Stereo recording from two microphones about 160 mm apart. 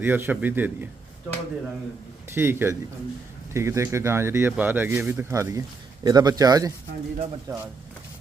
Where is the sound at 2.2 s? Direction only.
15° right (ahead or behind).